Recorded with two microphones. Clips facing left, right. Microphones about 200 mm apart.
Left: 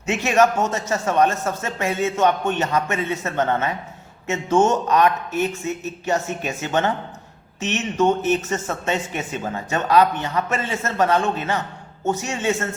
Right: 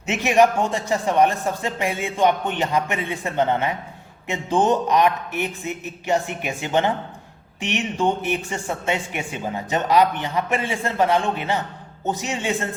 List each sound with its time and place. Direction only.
0.0 s speech: 15° right (ahead or behind)